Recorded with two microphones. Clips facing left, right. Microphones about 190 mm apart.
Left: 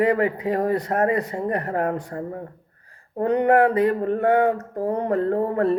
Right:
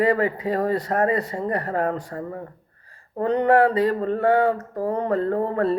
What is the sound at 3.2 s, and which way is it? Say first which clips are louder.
Speech: even; 15° left (ahead or behind).